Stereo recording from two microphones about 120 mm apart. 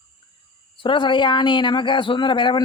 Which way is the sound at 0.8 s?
40° left (ahead or behind).